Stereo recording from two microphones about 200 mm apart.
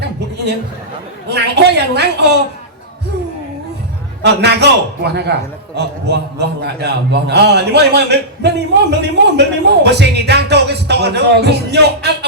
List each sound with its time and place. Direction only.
1.3 s a man's voice: 55° right (ahead or behind)
4.2 s a man's voice: 55° right (ahead or behind)